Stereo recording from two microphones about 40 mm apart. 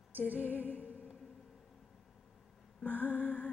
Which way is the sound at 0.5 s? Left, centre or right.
Left.